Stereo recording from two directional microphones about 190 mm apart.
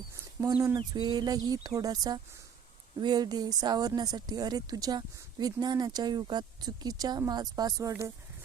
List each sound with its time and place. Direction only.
0.4 s speech: 10° right (ahead or behind)
0.8 s speech: 20° right (ahead or behind)